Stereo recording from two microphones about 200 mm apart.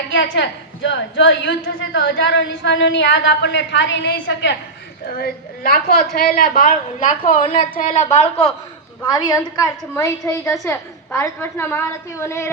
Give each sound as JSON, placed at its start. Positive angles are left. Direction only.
{"t": 0.1, "sound": "a woman's voice", "side_deg": 65}
{"t": 8.1, "sound": "a woman's voice", "side_deg": 30}
{"t": 9.0, "sound": "a woman's voice", "side_deg": 20}